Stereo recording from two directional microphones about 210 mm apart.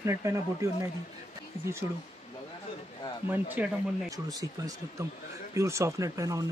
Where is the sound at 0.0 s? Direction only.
15° right (ahead or behind).